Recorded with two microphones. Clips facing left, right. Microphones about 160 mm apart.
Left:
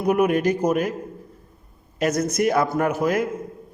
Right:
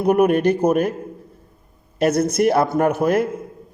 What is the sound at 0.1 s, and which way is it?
Speech, 55° right (ahead or behind).